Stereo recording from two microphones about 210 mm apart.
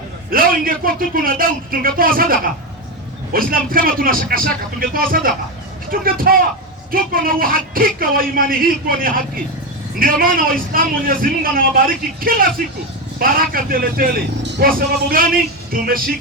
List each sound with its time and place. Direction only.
0.3 s a man's voice: 45° right (ahead or behind)